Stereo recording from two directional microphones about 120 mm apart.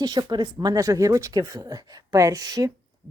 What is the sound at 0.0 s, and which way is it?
A woman's voice, 35° right (ahead or behind).